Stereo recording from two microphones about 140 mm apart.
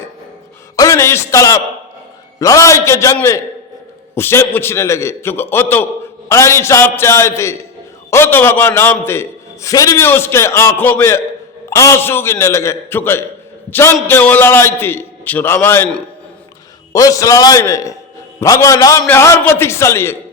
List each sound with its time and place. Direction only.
0.8 s a man's voice: 20° left (ahead or behind)
16.9 s a man's voice: 25° left (ahead or behind)